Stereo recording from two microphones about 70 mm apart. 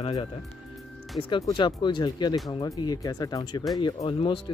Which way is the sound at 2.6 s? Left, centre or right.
Left.